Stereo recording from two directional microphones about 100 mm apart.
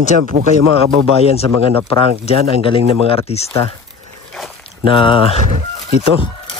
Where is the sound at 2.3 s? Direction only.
70° left (ahead or behind).